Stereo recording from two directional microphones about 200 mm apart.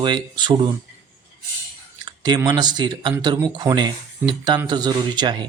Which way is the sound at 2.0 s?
20° right (ahead or behind).